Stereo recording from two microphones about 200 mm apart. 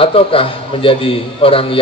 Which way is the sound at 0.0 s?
25° left (ahead or behind).